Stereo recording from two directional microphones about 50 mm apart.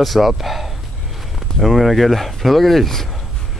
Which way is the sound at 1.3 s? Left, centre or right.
Centre.